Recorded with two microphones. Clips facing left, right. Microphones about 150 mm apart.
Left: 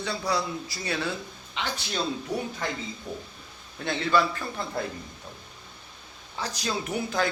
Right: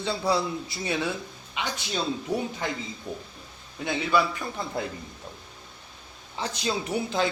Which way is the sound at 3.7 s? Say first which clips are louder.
Even; 10° right (ahead or behind).